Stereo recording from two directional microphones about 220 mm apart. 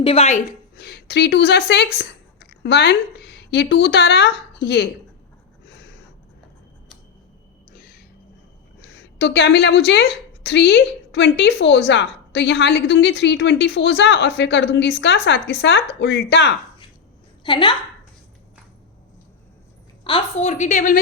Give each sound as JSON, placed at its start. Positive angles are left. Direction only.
{"t": 0.0, "sound": "a woman's voice", "side_deg": 25}
{"t": 0.8, "sound": "speech", "side_deg": 50}
{"t": 5.6, "sound": "a sound", "side_deg": 50}
{"t": 7.7, "sound": "a sound", "side_deg": 40}
{"t": 8.8, "sound": "a woman's voice", "side_deg": 50}
{"t": 17.4, "sound": "a woman's voice", "side_deg": 20}
{"t": 20.1, "sound": "a woman's voice", "side_deg": 25}